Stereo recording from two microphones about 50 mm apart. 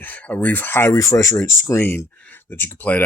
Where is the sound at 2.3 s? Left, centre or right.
Left.